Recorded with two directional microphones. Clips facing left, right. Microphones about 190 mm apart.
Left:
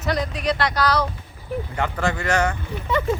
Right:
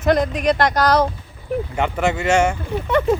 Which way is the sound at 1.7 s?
20° right (ahead or behind).